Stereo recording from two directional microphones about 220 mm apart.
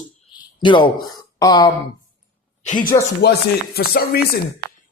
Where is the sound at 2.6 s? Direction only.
35° left (ahead or behind).